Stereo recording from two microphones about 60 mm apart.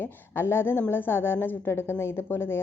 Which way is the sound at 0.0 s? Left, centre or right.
Left.